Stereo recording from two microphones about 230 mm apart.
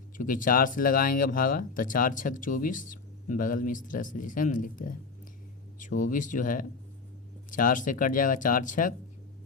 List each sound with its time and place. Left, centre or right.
0.2 s speech: left